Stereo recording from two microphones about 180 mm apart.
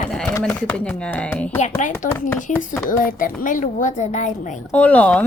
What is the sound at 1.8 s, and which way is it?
Speech, 45° left (ahead or behind).